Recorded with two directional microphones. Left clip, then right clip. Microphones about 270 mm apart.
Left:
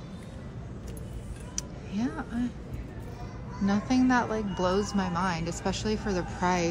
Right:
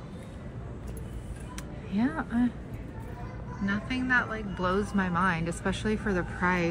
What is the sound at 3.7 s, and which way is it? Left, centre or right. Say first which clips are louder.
A woman's voice: left 2 dB; centre.